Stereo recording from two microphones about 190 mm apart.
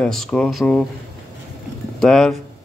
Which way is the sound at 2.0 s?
5° left (ahead or behind).